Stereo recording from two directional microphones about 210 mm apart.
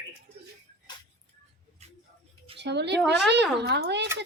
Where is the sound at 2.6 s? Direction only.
55° right (ahead or behind).